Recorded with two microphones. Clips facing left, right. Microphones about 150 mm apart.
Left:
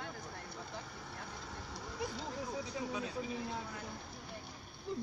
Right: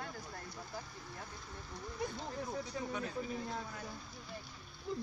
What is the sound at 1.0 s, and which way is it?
Speech, 80° left.